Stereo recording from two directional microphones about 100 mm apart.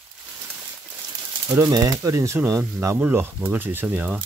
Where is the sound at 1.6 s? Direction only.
40° right (ahead or behind).